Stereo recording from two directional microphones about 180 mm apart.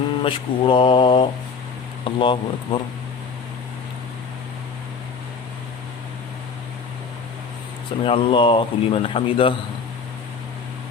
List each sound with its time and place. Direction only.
0.2 s speech: 30° left (ahead or behind)
8.0 s speech: 30° left (ahead or behind)